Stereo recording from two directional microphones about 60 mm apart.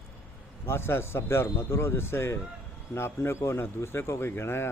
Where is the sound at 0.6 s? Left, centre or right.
Left.